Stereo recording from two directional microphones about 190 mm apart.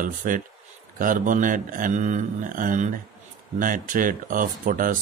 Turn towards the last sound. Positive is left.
turn(degrees=-45)  # may be behind; listen again after turning